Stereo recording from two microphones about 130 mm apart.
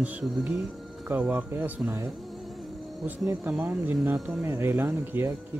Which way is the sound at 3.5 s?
10° right (ahead or behind).